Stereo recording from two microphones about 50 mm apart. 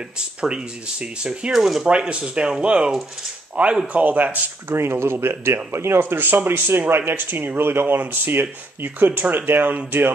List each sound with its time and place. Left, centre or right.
1.5 s speech: centre
1.9 s speech: right
4.0 s speech: right
4.6 s speech: right